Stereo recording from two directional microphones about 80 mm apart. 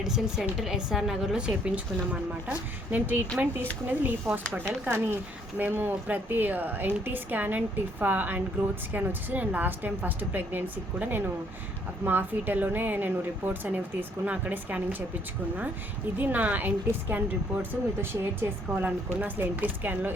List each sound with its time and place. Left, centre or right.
0.0 s a woman's voice: centre; by 10.6 s right
12.0 s speech: right
16.1 s speech: right